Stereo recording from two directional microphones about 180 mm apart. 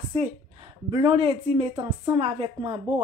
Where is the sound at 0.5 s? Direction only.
25° right (ahead or behind).